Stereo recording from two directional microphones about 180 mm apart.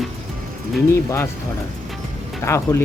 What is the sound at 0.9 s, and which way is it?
Speech, 15° left (ahead or behind).